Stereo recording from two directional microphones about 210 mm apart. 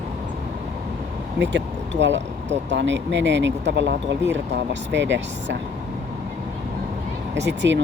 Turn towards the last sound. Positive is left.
turn(degrees=-55)  # may be behind; listen again after turning